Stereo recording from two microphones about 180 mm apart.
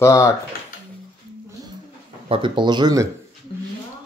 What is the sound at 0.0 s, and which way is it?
Speech, 15° left (ahead or behind).